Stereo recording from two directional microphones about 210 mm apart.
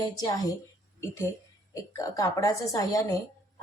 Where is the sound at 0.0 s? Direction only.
20° left (ahead or behind).